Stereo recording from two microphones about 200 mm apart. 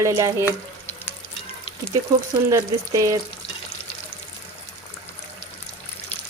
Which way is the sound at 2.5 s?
15° right (ahead or behind).